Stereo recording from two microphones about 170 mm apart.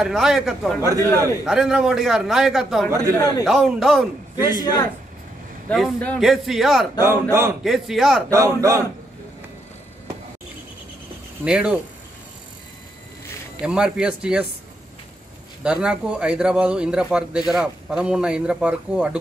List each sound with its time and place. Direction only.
0.0 s speech: centre (ahead or behind)
0.7 s a man's voice: 20° right (ahead or behind)
1.4 s speech: 5° right (ahead or behind)
4.5 s a man's voice: 25° left (ahead or behind)
5.7 s speech: 5° left (ahead or behind)
7.0 s speech: 15° right (ahead or behind)
7.6 s speech: centre (ahead or behind)
8.3 s a man's voice: 20° right (ahead or behind)
11.4 s speech: 5° right (ahead or behind)
13.6 s speech: 5° right (ahead or behind)
15.6 s speech: 5° right (ahead or behind)